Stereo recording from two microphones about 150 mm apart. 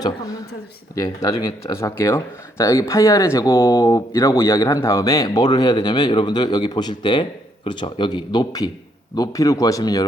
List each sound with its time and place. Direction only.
0.9 s speech: 25° left (ahead or behind)